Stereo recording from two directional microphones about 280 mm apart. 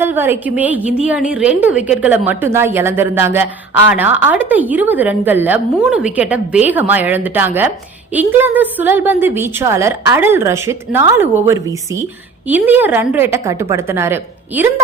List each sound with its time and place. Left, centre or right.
0.0 s a woman's voice: centre